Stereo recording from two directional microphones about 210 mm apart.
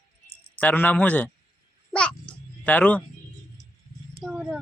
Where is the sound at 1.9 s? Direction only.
5° left (ahead or behind).